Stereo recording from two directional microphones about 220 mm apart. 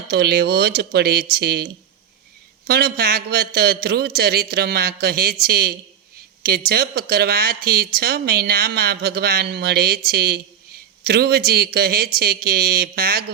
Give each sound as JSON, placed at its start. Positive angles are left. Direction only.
{"t": 0.1, "sound": "speech", "side_deg": -45}